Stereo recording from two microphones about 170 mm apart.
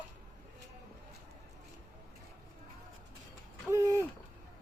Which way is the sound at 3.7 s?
20° right (ahead or behind).